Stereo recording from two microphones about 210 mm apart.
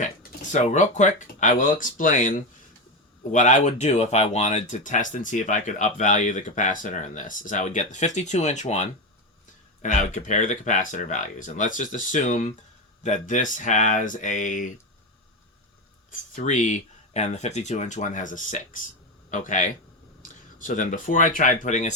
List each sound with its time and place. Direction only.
0.0 s speech: 35° left (ahead or behind)
16.3 s speech: 35° left (ahead or behind)